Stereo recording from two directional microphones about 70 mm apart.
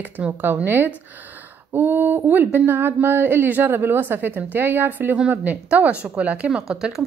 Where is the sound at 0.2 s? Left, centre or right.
Right.